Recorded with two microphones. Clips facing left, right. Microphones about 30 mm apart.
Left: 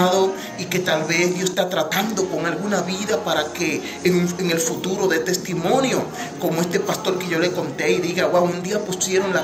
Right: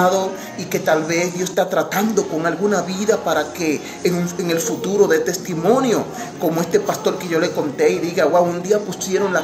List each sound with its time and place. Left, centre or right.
0.0 s a man's voice: left